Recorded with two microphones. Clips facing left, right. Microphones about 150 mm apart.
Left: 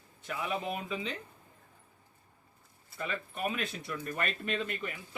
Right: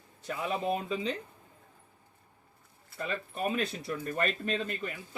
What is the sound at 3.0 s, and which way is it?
Speech, 35° right (ahead or behind).